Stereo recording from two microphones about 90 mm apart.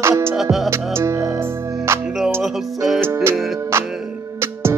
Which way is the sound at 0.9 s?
35° right (ahead or behind).